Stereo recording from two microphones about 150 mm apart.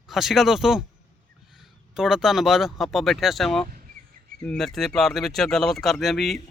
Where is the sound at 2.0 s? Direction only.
5° right (ahead or behind).